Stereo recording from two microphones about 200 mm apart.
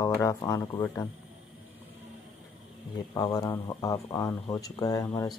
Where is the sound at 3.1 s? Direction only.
20° left (ahead or behind).